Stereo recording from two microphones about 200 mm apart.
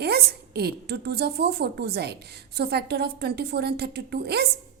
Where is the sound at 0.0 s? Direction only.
50° right (ahead or behind).